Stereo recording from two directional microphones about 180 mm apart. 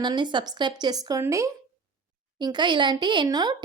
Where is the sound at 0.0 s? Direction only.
25° right (ahead or behind).